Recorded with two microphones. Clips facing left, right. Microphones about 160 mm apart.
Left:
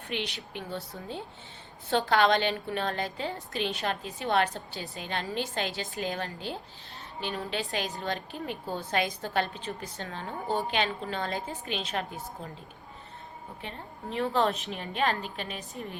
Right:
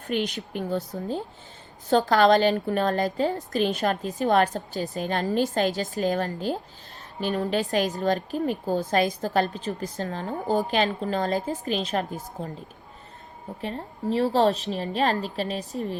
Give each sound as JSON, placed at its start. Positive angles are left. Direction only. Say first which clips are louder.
{"t": 0.1, "sound": "a woman's voice", "louder": "right 8 dB", "side_deg": -40}
{"t": 13.6, "sound": "a woman's voice", "louder": "right 11 dB", "side_deg": -35}